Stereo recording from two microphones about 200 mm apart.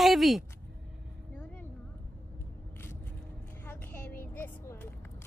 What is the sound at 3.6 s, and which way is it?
Vehicle, 10° left (ahead or behind).